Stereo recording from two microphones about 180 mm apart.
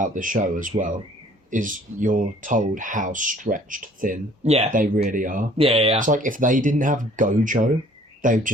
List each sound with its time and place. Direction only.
0.0 s speech: 45° right (ahead or behind)
4.9 s speech: 45° right (ahead or behind)
5.5 s speech: 30° right (ahead or behind)
6.0 s speech: 45° right (ahead or behind)